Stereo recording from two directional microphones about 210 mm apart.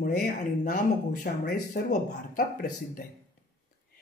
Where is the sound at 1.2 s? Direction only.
40° left (ahead or behind).